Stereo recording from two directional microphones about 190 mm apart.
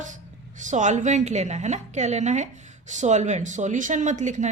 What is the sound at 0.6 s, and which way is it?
A woman's voice, 40° right (ahead or behind).